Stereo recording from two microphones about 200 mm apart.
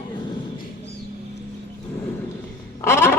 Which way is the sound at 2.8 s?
10° left (ahead or behind).